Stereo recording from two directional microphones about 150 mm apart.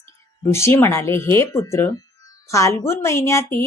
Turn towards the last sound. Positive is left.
turn(degrees=20)  # may be behind; listen again after turning